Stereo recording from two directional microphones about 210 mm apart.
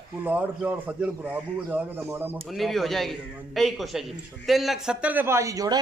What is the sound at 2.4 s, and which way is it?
A man's voice, centre (ahead or behind).